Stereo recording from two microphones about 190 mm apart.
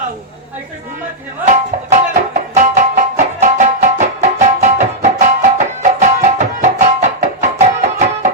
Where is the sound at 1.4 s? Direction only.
40° right (ahead or behind).